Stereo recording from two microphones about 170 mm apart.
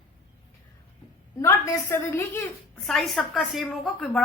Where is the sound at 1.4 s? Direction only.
15° left (ahead or behind).